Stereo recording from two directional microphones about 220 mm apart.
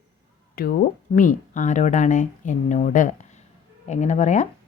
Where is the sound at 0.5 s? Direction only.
40° left (ahead or behind).